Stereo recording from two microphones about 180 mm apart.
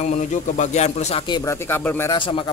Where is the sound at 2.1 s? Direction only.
30° left (ahead or behind).